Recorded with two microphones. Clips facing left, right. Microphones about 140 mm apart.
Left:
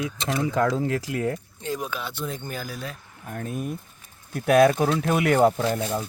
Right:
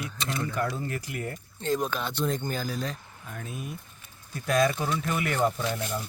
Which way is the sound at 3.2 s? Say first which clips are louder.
Left 8 dB; 55° left (ahead or behind).